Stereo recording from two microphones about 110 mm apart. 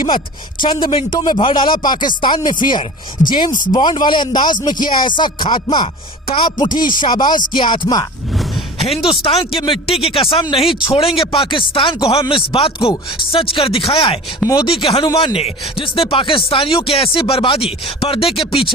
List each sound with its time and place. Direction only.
0.6 s speech: 45° left (ahead or behind)
8.3 s a sound: centre (ahead or behind)
8.8 s speech: 60° left (ahead or behind)
14.4 s speech: 30° left (ahead or behind)
14.7 s speech: 55° left (ahead or behind)